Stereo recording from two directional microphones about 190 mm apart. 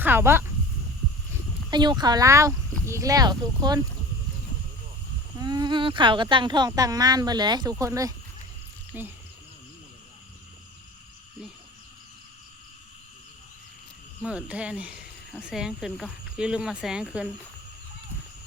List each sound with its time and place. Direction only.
0.0 s speech: 10° right (ahead or behind)
1.3 s speech: 25° right (ahead or behind)
5.4 s speech: 20° right (ahead or behind)
14.2 s speech: 5° right (ahead or behind)